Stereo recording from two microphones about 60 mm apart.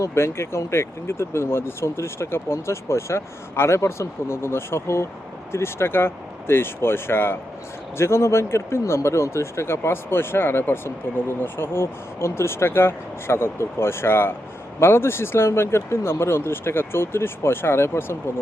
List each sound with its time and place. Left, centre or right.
0.0 s speech: left